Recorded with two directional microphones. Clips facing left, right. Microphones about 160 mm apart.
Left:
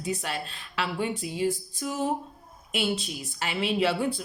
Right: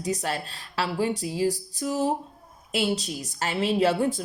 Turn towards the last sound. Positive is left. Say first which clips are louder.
# right 3 dB
turn(degrees=-45)  # may be behind; listen again after turning